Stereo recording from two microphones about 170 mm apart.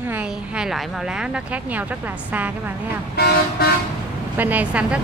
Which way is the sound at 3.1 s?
70° left (ahead or behind).